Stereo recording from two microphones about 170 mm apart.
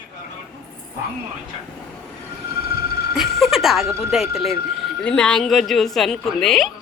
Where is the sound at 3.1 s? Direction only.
Centre (ahead or behind).